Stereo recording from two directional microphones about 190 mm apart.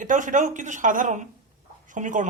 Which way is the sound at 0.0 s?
45° right (ahead or behind).